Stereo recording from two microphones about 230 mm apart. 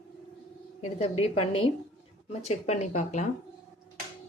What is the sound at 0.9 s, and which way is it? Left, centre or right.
Speech, left.